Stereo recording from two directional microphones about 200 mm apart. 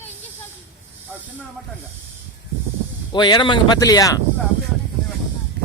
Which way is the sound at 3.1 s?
20° left (ahead or behind).